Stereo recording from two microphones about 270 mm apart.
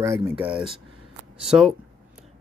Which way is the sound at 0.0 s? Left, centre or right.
Centre.